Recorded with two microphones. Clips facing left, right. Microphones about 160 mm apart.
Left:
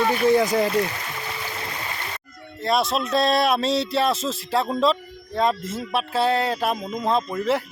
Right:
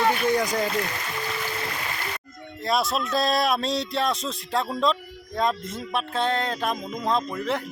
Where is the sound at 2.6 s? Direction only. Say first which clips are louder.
Left 3 dB; centre (ahead or behind).